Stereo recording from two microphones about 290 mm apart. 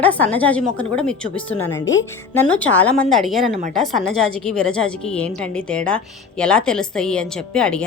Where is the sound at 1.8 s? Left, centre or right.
Left.